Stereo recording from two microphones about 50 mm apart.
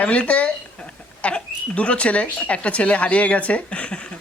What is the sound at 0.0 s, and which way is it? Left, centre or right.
Speech, left.